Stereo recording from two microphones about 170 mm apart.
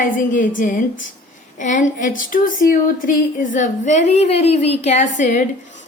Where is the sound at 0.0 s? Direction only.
50° left (ahead or behind).